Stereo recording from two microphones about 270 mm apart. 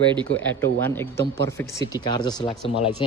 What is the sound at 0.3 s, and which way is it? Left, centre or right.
Speech, centre.